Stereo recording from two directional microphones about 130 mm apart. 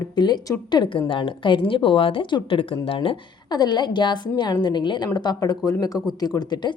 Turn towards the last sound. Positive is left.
turn(degrees=35)  # may be behind; listen again after turning